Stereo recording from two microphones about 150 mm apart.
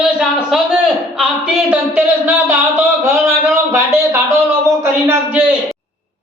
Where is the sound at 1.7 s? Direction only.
10° right (ahead or behind).